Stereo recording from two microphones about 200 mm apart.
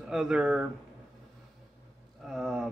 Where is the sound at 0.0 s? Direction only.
Centre (ahead or behind).